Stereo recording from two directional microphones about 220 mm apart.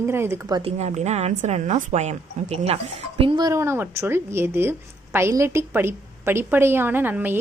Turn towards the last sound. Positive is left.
turn(degrees=-10)  # may be behind; listen again after turning